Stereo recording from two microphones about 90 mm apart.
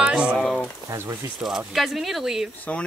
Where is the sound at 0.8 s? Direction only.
35° right (ahead or behind).